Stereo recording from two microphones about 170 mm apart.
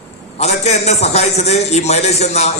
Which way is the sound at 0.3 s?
40° left (ahead or behind).